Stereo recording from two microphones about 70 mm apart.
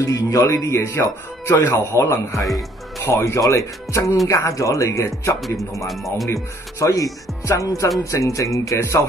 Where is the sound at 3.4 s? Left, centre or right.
Left.